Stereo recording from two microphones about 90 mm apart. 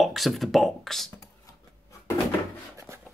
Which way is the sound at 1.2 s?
40° left (ahead or behind).